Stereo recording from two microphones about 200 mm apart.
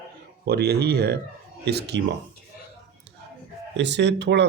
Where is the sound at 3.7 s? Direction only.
60° right (ahead or behind).